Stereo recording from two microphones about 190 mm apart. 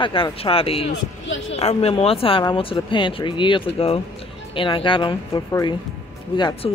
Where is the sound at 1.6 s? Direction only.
35° left (ahead or behind).